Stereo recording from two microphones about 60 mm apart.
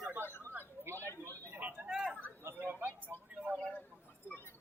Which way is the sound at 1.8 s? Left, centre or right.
Centre.